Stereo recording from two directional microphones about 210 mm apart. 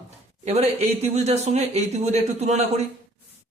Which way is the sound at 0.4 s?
30° right (ahead or behind).